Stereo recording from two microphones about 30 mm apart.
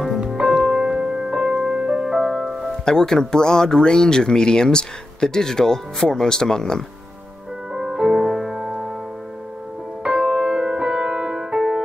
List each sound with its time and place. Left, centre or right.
0.6 s music: centre
2.8 s speech: left
7.7 s music: centre
10.1 s music: centre
10.5 s music: right